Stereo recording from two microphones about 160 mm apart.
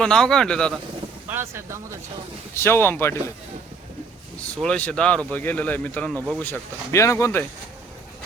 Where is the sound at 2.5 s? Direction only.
15° left (ahead or behind).